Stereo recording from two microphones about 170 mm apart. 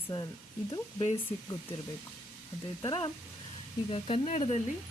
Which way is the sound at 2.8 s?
30° left (ahead or behind).